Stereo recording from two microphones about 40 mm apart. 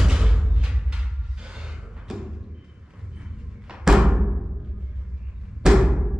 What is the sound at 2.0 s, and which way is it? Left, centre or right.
Music, centre.